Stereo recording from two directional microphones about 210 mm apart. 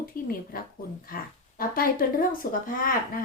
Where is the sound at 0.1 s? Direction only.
45° left (ahead or behind).